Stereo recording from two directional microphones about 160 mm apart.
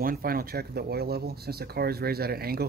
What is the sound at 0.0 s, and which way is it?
Speech, 65° right (ahead or behind).